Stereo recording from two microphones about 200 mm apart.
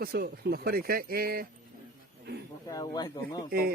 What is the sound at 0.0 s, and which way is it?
Speech, 50° right (ahead or behind).